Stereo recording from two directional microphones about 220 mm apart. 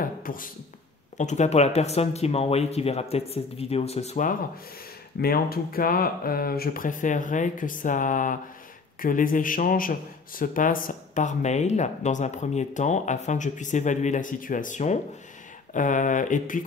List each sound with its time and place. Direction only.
0.0 s beatboxing: 40° left (ahead or behind)
1.1 s a man's voice: 35° left (ahead or behind)